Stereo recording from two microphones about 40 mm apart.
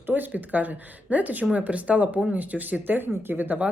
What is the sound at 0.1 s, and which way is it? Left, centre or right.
Speech, right.